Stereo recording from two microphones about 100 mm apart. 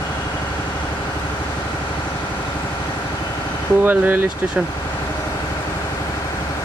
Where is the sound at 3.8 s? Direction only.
20° right (ahead or behind).